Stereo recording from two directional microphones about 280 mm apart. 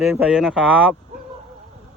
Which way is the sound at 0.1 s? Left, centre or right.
Centre.